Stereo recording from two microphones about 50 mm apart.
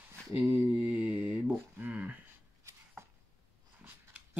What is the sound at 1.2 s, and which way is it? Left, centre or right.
Speech, right.